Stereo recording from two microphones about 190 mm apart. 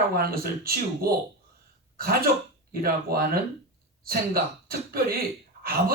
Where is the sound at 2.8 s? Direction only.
55° right (ahead or behind).